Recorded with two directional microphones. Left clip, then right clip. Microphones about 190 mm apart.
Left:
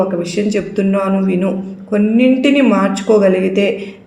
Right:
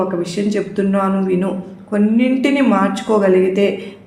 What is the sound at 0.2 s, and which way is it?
A woman's voice, 25° left (ahead or behind).